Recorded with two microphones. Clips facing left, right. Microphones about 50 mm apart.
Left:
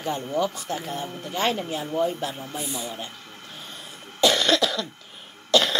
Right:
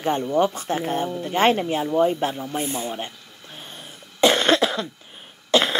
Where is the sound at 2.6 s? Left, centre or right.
Right.